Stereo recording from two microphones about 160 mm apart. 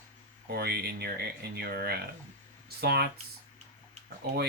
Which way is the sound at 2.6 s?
85° right.